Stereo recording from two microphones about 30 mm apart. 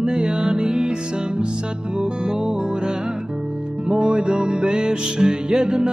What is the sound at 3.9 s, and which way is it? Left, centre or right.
Music, right.